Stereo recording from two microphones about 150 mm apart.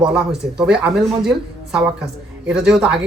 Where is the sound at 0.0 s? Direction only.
5° right (ahead or behind).